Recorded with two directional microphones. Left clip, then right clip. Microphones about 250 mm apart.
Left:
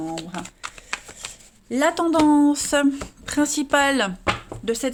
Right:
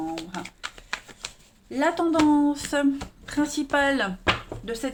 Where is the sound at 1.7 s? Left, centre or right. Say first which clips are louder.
Left 3 dB; left.